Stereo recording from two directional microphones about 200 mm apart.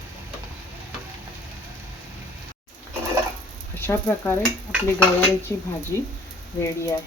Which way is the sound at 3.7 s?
10° left (ahead or behind).